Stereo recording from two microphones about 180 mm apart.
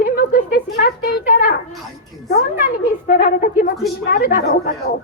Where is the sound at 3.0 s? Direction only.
55° left (ahead or behind).